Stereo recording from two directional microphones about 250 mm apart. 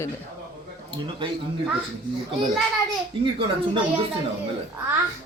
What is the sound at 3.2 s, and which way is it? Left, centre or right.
Speech, centre.